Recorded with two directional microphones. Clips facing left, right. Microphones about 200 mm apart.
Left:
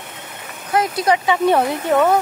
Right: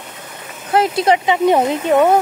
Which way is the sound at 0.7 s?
25° right (ahead or behind).